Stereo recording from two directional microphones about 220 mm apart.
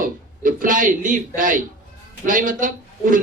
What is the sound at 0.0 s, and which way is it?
A man's voice, 40° right (ahead or behind).